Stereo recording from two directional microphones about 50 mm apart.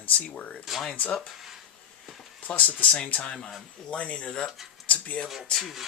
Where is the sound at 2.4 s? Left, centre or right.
Left.